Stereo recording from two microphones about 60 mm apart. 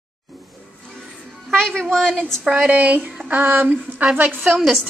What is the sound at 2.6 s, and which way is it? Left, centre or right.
Speech, right.